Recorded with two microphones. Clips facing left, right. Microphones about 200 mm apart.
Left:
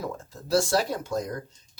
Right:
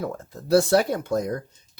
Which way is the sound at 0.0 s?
60° right (ahead or behind).